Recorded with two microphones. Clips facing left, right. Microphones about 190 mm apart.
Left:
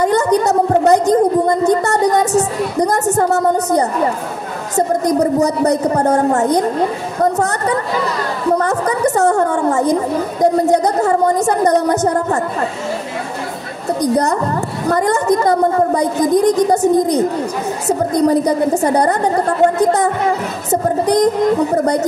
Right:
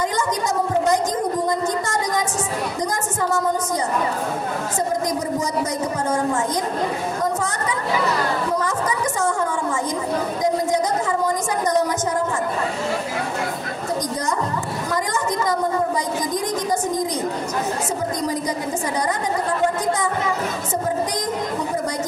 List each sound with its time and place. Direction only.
0.0 s a woman's voice: 65° left (ahead or behind)
4.7 s a woman's voice: 65° left (ahead or behind)
14.1 s a woman's voice: 65° left (ahead or behind)
20.7 s a woman's voice: 65° left (ahead or behind)